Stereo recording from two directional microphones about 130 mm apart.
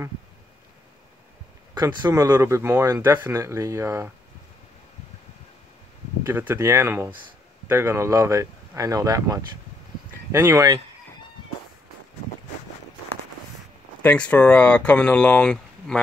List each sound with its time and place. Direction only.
1.8 s speech: 35° right (ahead or behind)
2.3 s speech: 20° right (ahead or behind)
6.2 s speech: 15° right (ahead or behind)
14.0 s speech: 10° left (ahead or behind)